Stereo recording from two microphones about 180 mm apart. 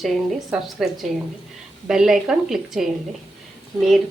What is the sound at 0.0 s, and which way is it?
A woman's voice, centre (ahead or behind).